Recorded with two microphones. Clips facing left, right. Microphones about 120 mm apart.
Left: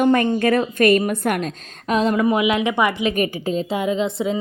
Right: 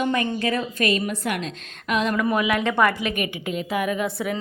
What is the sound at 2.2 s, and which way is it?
Speech, 20° left (ahead or behind).